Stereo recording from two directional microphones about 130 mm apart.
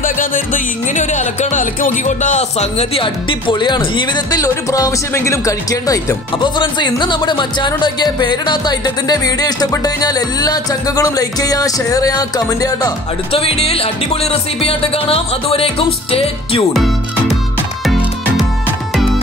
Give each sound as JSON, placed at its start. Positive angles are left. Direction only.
{"t": 0.0, "sound": "speech", "side_deg": 90}
{"t": 13.3, "sound": "music", "side_deg": 50}
{"t": 16.7, "sound": "music", "side_deg": 0}